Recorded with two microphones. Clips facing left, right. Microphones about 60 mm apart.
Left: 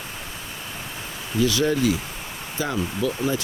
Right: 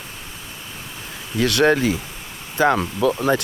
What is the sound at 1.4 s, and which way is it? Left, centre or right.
Speech, right.